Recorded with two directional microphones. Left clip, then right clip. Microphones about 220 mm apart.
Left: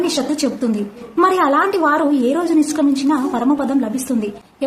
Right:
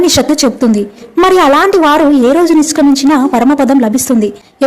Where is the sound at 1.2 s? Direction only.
35° right (ahead or behind).